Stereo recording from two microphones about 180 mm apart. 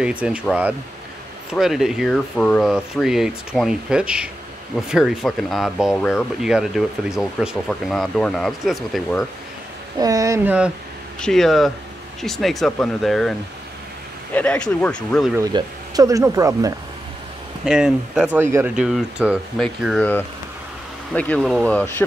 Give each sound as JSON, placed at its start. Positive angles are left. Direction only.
{"t": 0.0, "sound": "speech", "side_deg": -5}
{"t": 9.9, "sound": "speech", "side_deg": -20}
{"t": 11.1, "sound": "speech", "side_deg": 5}
{"t": 15.3, "sound": "speech", "side_deg": -20}
{"t": 17.6, "sound": "speech", "side_deg": -5}
{"t": 21.1, "sound": "speech", "side_deg": 5}